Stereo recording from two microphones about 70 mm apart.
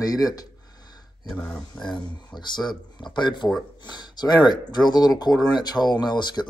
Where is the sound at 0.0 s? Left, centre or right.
Left.